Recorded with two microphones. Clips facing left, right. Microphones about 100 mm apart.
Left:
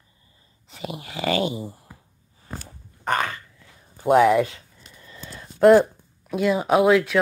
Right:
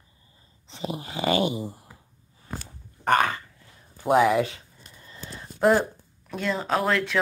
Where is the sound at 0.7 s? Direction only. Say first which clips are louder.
Right 1 dB; 25° right (ahead or behind).